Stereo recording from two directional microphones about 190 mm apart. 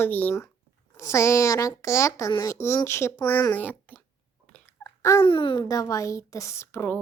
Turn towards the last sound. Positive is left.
turn(degrees=15)  # may be behind; listen again after turning